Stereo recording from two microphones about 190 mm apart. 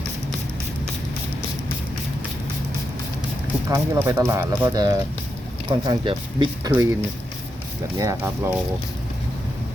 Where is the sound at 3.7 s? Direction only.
15° right (ahead or behind).